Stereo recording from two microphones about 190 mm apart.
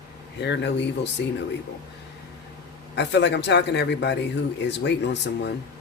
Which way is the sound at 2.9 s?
65° left (ahead or behind).